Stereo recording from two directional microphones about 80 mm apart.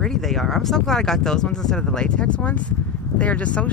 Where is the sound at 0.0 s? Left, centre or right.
Centre.